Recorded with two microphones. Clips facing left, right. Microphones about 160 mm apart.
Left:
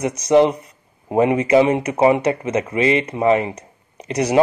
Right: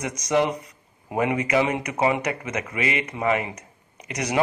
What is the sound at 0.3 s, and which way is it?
Speech, 25° left (ahead or behind).